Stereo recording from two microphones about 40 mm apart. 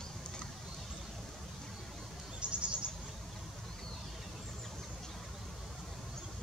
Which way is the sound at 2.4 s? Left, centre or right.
Right.